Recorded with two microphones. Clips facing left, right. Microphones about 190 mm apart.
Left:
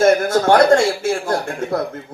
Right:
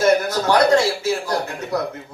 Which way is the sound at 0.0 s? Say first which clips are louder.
Left 3 dB; 50° left (ahead or behind).